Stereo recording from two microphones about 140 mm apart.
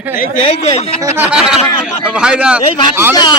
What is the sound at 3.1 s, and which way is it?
Speech, 30° left (ahead or behind).